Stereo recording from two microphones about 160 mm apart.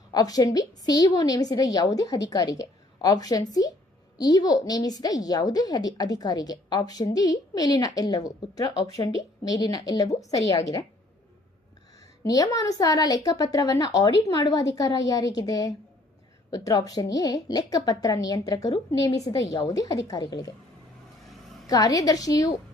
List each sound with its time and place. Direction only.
0.1 s a woman's voice: 25° left (ahead or behind)
11.9 s a woman's voice: 20° left (ahead or behind)
21.7 s a woman's voice: 20° left (ahead or behind)